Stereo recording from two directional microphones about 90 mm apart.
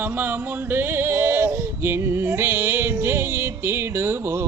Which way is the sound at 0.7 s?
25° right (ahead or behind).